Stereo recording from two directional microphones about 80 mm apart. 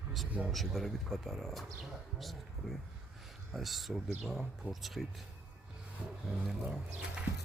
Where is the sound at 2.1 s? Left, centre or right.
Centre.